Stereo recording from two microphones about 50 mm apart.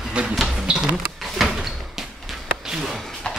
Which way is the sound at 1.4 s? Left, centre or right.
Centre.